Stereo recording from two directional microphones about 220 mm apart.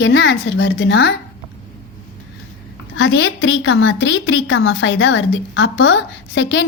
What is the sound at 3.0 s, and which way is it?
A woman's voice, 55° left (ahead or behind).